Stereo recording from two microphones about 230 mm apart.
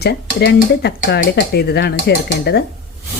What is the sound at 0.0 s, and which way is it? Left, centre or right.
Speech, left.